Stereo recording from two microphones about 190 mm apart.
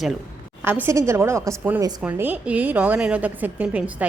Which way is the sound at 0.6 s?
10° right (ahead or behind).